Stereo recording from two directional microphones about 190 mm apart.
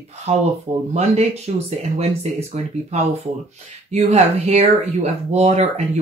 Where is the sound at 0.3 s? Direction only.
30° right (ahead or behind).